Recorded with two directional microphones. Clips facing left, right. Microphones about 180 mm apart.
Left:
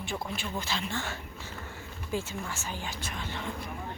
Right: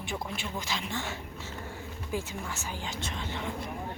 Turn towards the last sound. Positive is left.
turn(degrees=-20)  # may be behind; listen again after turning